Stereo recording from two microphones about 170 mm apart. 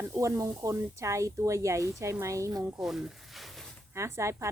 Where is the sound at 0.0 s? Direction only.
15° right (ahead or behind).